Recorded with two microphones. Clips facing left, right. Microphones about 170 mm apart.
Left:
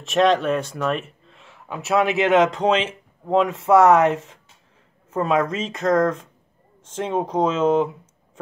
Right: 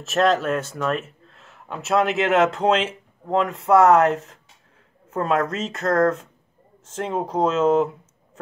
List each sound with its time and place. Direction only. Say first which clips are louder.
0.0 s speech: left 2 dB; centre (ahead or behind)